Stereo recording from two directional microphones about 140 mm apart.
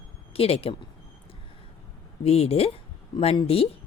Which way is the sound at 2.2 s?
45° left (ahead or behind).